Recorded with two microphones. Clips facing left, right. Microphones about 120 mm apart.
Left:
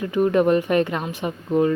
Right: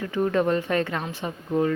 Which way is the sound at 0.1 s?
15° left (ahead or behind).